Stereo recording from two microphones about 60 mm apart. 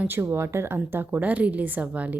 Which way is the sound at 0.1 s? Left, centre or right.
Right.